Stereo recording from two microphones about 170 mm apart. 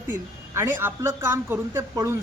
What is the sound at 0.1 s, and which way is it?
A woman's voice, 15° right (ahead or behind).